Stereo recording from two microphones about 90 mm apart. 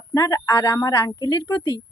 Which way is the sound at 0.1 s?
40° left (ahead or behind).